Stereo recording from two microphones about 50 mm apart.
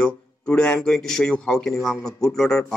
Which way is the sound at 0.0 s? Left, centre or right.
Centre.